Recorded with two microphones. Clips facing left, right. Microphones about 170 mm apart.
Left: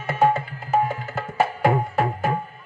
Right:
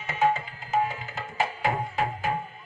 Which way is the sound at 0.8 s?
45° left (ahead or behind).